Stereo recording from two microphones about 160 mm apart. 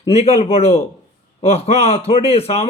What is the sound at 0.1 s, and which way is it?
A man's voice, 40° left (ahead or behind).